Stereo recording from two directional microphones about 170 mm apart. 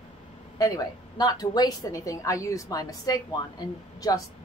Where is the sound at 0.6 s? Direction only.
25° left (ahead or behind).